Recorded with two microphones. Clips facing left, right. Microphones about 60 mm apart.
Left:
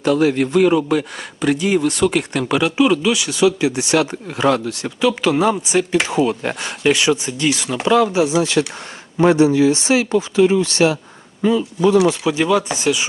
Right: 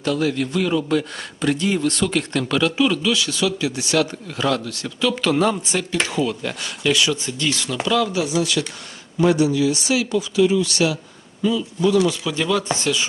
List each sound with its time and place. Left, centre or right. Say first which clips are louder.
0.0 s speech: left 6 dB; left
1.4 s speech: left 4 dB; centre
5.3 s speech: left 3 dB; centre
6.1 s speech: left 5 dB; left
7.9 s speech: left 6 dB; left
11.4 s speech: left 4 dB; left
12.3 s speech: left 4 dB; centre